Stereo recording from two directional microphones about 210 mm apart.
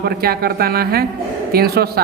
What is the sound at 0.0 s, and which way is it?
A man's voice, 45° right (ahead or behind).